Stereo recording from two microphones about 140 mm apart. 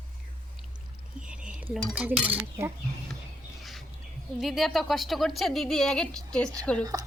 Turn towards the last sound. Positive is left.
turn(degrees=-25)  # may be behind; listen again after turning